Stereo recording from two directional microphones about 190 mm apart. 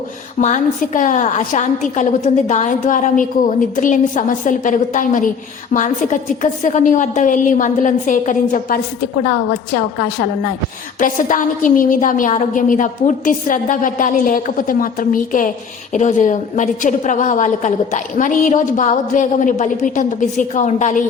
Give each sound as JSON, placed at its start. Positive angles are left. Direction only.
{"t": 0.4, "sound": "a woman's voice", "side_deg": 40}
{"t": 9.7, "sound": "a woman's voice", "side_deg": 55}
{"t": 11.0, "sound": "a woman's voice", "side_deg": 45}